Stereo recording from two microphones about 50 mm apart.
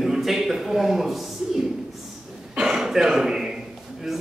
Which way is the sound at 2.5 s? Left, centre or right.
Centre.